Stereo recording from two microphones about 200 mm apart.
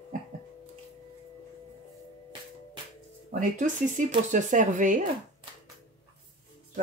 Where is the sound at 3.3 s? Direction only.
40° right (ahead or behind).